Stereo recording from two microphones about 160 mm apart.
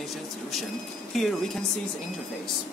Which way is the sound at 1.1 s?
Centre (ahead or behind).